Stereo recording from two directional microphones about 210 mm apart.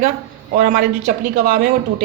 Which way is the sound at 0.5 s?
40° right (ahead or behind).